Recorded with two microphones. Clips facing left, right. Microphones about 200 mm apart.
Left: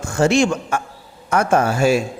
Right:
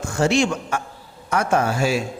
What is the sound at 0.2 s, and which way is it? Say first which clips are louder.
Speech: left 3 dB; 50° left (ahead or behind).